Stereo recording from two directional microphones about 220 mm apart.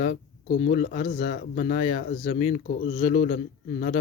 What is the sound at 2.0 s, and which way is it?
Speech, 40° left (ahead or behind).